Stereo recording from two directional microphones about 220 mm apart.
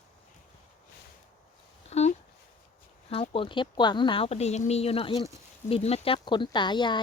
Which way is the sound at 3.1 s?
25° left (ahead or behind).